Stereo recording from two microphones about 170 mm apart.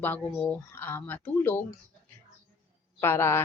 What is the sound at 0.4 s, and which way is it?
Speech, 10° left (ahead or behind).